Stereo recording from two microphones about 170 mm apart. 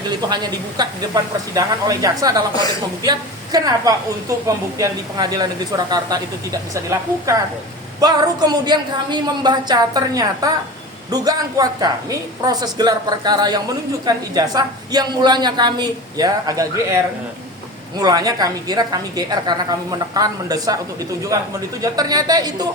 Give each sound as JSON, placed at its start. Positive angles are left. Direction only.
{"t": 0.3, "sound": "a woman's voice", "side_deg": -25}
{"t": 8.0, "sound": "a woman's voice", "side_deg": -25}